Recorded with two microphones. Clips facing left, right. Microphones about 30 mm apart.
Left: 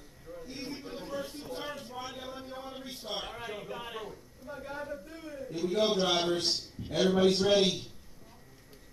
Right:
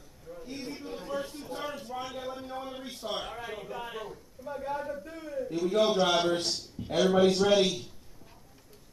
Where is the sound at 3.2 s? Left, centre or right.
Centre.